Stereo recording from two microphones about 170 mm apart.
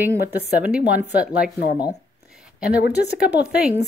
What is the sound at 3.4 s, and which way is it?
Speech, 5° right (ahead or behind).